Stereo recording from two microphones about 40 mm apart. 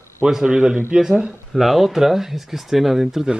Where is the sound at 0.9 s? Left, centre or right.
Centre.